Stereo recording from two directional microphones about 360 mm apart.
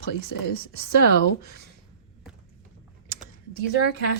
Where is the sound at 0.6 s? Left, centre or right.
Right.